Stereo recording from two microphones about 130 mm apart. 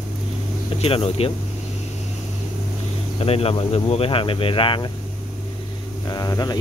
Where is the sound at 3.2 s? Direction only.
50° left (ahead or behind).